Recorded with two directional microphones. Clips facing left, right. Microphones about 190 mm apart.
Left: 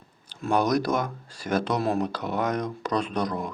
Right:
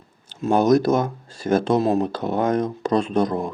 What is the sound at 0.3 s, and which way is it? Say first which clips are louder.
Speech: right 7 dB; 25° right (ahead or behind).